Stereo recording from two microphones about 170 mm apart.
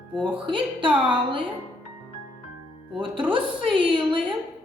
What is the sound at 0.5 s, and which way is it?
Speech, 30° right (ahead or behind).